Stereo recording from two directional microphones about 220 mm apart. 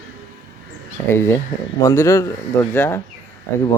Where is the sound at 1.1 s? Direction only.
10° left (ahead or behind).